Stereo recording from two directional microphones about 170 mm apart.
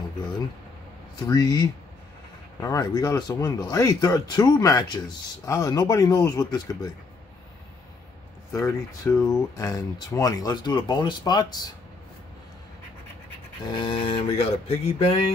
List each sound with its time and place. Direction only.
1.2 s speech: 25° left (ahead or behind)
8.5 s speech: 15° left (ahead or behind)
13.7 s a sound: 25° left (ahead or behind)